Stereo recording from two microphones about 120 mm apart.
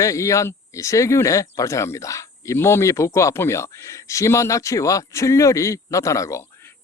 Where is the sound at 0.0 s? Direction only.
25° left (ahead or behind).